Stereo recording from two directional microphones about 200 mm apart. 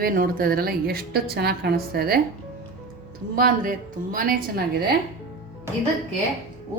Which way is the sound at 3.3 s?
45° right (ahead or behind).